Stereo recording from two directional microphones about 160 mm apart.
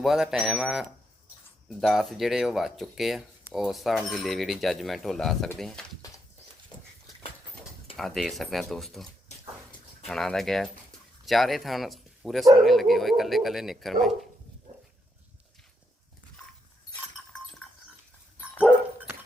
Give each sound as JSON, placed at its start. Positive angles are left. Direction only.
{"t": 0.0, "sound": "speech", "side_deg": 0}
{"t": 6.7, "sound": "horse", "side_deg": 30}
{"t": 7.9, "sound": "speech", "side_deg": 0}
{"t": 10.1, "sound": "speech", "side_deg": 5}